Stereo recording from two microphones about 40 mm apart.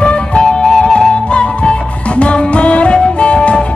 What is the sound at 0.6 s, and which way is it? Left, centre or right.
Music, centre.